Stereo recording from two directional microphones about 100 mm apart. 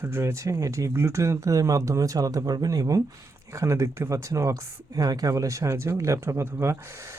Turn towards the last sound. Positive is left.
turn(degrees=-25)  # may be behind; listen again after turning